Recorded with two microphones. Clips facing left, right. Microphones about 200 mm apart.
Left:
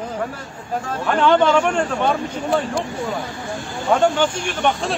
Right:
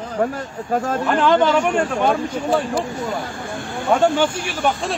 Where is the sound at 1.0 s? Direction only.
Centre (ahead or behind).